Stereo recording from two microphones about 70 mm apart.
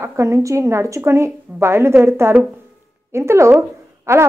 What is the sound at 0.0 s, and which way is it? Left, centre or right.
A woman's voice, right.